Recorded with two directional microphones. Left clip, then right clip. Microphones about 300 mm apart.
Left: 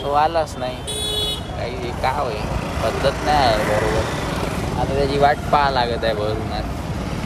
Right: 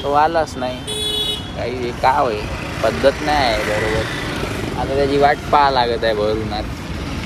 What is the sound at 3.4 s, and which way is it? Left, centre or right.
Speech, left.